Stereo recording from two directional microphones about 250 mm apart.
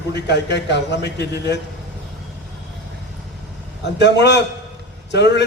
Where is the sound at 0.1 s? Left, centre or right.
Left.